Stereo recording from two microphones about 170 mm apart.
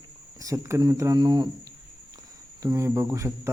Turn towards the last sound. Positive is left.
turn(degrees=-15)  # may be behind; listen again after turning